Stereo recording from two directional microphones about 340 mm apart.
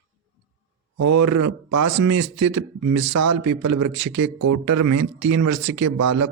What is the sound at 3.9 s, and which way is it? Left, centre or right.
Speech, right.